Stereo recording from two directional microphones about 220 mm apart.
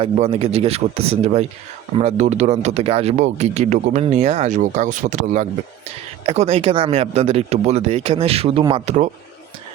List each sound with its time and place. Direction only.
0.0 s speech: 25° right (ahead or behind)